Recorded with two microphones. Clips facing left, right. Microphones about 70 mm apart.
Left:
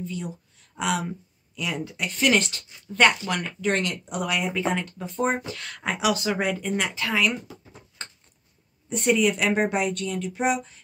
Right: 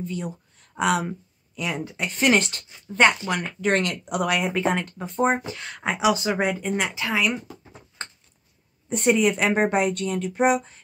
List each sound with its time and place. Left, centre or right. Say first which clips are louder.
0.0 s a sound: right 2 dB; right
1.7 s speech: right 1 dB; right
3.3 s speech: right 2 dB; centre
3.6 s speech: right 3 dB; right
5.5 s speech: right 1 dB; centre
5.8 s speech: right 2 dB; centre
6.0 s speech: right 2 dB; centre
8.0 s a sound: right 4 dB; right
8.8 s a woman's voice: right 2 dB; right